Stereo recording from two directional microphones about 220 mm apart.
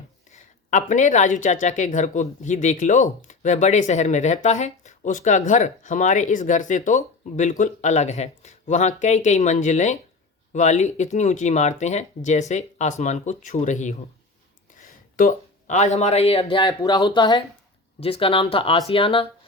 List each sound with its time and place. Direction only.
0.3 s speech: 35° left (ahead or behind)